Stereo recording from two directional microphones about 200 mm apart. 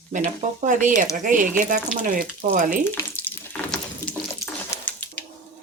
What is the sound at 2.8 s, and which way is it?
Frying, 10° left (ahead or behind).